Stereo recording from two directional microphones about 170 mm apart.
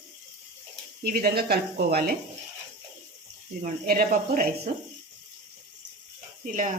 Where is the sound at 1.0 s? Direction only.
65° right (ahead or behind).